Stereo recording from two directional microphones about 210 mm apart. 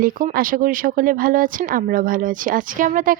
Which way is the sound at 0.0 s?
40° right (ahead or behind).